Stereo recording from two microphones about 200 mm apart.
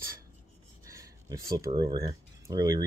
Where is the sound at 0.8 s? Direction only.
15° right (ahead or behind).